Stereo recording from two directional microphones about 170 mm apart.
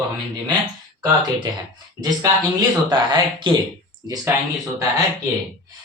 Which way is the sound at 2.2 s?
25° right (ahead or behind).